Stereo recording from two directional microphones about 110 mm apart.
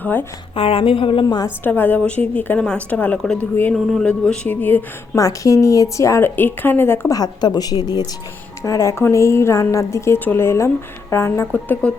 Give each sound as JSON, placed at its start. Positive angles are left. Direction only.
{"t": 0.0, "sound": "a woman's voice", "side_deg": 15}
{"t": 0.5, "sound": "a woman's voice", "side_deg": 55}
{"t": 1.6, "sound": "a woman's voice", "side_deg": 15}
{"t": 5.1, "sound": "speech", "side_deg": 30}
{"t": 7.1, "sound": "a woman's voice", "side_deg": 40}